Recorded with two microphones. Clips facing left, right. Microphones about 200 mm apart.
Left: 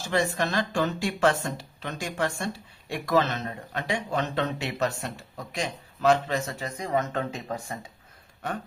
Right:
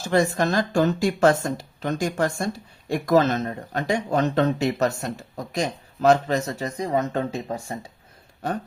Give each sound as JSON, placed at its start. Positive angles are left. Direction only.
{"t": 0.0, "sound": "speech", "side_deg": -45}